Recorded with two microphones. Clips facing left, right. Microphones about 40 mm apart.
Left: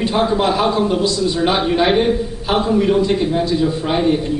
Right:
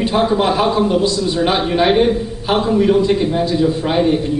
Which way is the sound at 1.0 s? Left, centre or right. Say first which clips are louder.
Right 1 dB; right.